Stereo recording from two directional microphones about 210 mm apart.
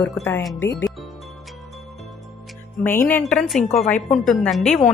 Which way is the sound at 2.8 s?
10° left (ahead or behind).